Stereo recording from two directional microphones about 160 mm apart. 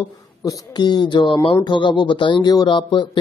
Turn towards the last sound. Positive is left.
turn(degrees=30)  # may be behind; listen again after turning